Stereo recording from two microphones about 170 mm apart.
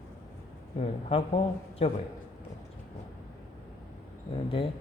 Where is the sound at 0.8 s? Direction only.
35° left (ahead or behind).